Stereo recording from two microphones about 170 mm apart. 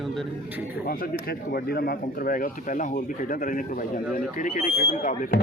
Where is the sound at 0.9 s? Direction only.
60° left (ahead or behind).